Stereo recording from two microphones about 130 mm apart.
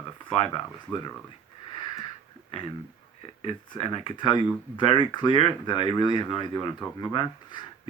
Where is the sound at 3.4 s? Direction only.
45° left (ahead or behind).